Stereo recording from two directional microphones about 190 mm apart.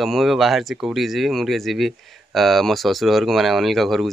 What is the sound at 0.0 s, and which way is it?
Speech, centre (ahead or behind).